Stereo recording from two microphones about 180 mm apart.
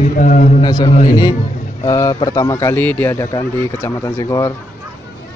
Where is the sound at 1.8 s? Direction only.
20° left (ahead or behind).